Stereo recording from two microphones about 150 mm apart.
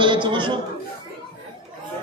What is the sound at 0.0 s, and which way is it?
Speech, 35° right (ahead or behind).